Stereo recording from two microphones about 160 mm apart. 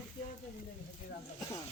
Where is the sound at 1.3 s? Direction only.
25° left (ahead or behind).